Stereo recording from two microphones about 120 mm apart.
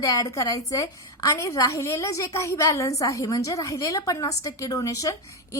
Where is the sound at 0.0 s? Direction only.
30° left (ahead or behind).